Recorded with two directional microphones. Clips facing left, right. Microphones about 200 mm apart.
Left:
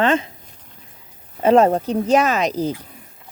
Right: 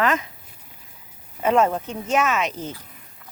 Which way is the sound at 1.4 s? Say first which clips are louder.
Left 6 dB; 35° left (ahead or behind).